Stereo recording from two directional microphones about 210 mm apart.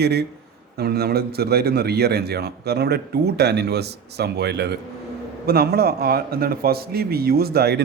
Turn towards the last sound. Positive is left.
turn(degrees=-50)  # may be behind; listen again after turning